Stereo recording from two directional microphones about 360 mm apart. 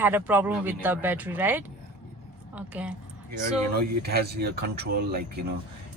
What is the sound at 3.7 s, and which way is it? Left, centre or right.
Speech, right.